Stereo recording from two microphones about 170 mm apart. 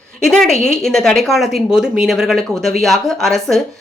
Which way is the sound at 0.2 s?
5° left (ahead or behind).